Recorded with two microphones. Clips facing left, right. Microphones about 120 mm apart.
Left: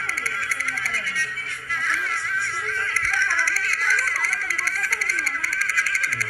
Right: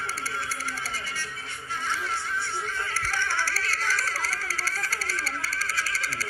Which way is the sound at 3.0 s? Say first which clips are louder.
Left 3 dB; 25° right (ahead or behind).